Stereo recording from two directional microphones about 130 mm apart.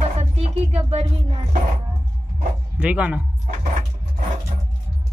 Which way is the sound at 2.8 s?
10° right (ahead or behind).